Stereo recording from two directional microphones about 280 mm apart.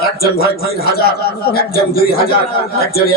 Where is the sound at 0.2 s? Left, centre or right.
Left.